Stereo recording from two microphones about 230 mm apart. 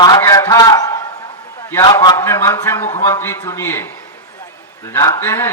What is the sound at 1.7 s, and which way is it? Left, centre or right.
Speech, centre.